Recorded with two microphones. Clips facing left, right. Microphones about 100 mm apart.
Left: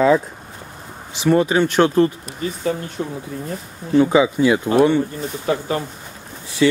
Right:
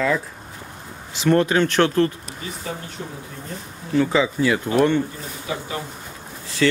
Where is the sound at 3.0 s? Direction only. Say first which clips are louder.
Left 8 dB; 75° left (ahead or behind).